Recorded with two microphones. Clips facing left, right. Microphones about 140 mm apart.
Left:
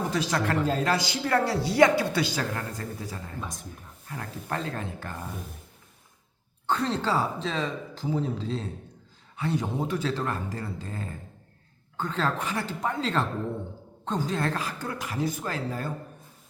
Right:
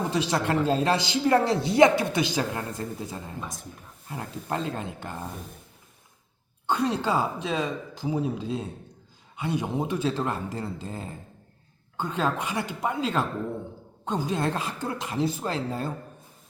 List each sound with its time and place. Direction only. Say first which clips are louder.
0.1 s speech: right 2 dB; 20° right (ahead or behind)
3.4 s speech: even; centre (ahead or behind)
4.1 s speech: right 2 dB; 20° right (ahead or behind)
6.7 s speech: right 1 dB; 10° right (ahead or behind)